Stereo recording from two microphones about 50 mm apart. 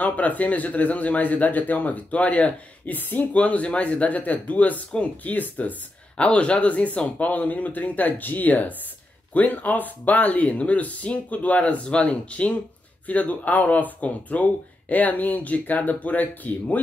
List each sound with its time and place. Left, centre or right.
0.0 s a man's voice: left